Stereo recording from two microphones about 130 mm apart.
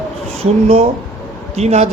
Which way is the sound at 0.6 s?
50° right (ahead or behind).